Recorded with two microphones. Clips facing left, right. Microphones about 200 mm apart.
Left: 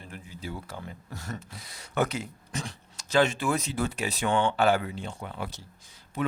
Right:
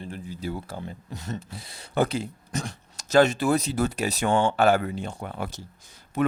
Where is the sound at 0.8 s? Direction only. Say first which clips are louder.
Right 4 dB; 25° right (ahead or behind).